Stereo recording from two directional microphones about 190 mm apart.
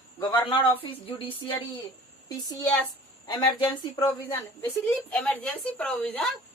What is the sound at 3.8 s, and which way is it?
A woman's voice, 15° left (ahead or behind).